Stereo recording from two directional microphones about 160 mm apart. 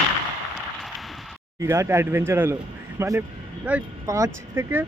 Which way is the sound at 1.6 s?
15° right (ahead or behind).